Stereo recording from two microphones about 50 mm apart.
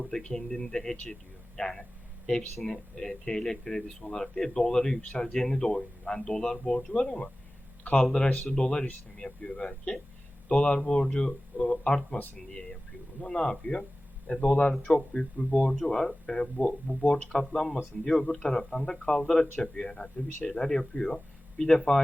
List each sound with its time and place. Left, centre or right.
0.1 s speech: centre
13.2 s speech: centre
15.7 s speech: centre